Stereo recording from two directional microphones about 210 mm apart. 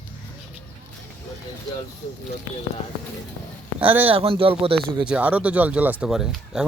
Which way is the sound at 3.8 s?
10° right (ahead or behind).